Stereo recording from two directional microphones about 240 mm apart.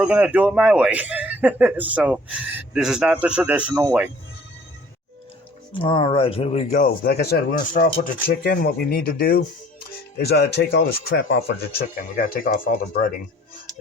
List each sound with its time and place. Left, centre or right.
0.0 s speech: centre
5.7 s speech: left